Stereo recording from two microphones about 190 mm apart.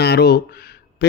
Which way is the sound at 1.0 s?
60° left (ahead or behind).